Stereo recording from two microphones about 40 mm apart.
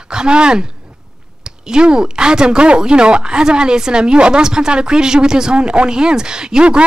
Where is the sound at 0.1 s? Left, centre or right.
Right.